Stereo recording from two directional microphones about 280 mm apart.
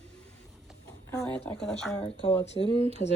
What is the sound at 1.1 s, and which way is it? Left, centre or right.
Speech, centre.